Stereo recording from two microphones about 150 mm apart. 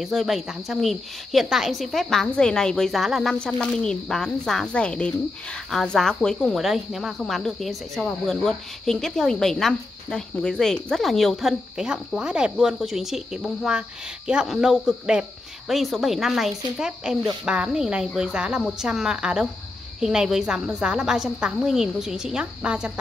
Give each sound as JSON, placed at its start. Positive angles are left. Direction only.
{"t": 0.0, "sound": "speech", "side_deg": 0}